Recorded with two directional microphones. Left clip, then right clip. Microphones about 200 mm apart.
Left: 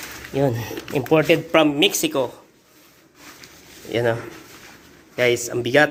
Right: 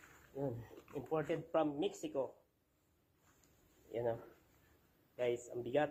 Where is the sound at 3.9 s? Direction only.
10° left (ahead or behind).